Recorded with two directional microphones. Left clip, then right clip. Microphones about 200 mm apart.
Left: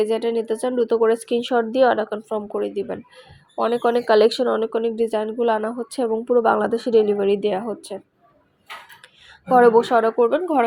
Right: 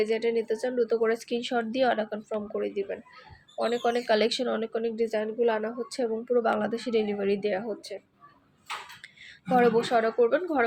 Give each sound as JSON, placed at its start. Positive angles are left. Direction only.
{"t": 0.0, "sound": "speech", "side_deg": 35}
{"t": 9.5, "sound": "speech", "side_deg": 30}